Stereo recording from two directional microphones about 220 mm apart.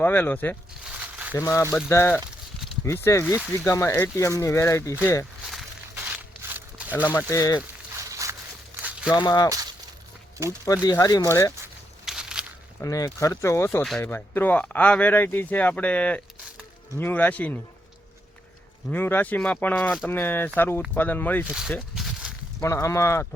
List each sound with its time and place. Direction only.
0.0 s speech: 10° left (ahead or behind)
0.9 s a sound: 5° right (ahead or behind)
1.4 s speech: 15° left (ahead or behind)
5.5 s a sound: 5° right (ahead or behind)
7.1 s speech: 10° left (ahead or behind)
8.1 s walk: 15° right (ahead or behind)
9.1 s speech: 20° left (ahead or behind)
10.8 s speech: 15° left (ahead or behind)
11.6 s a sound: 5° right (ahead or behind)
12.8 s speech: 15° left (ahead or behind)
18.9 s speech: 10° left (ahead or behind)
21.4 s speech: 5° right (ahead or behind)
21.7 s a sound: 5° left (ahead or behind)
22.6 s speech: 15° left (ahead or behind)